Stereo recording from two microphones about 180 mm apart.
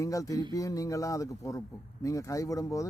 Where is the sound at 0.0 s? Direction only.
20° left (ahead or behind).